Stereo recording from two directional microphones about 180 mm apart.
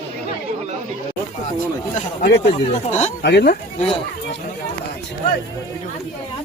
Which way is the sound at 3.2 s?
70° left (ahead or behind).